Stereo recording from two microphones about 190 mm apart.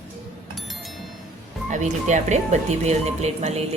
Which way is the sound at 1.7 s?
40° right (ahead or behind).